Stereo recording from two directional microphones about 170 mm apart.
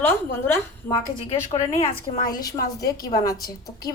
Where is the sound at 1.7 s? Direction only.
35° left (ahead or behind).